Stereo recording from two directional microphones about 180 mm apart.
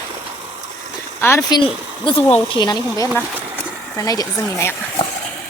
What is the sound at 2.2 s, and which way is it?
Speech, 10° left (ahead or behind).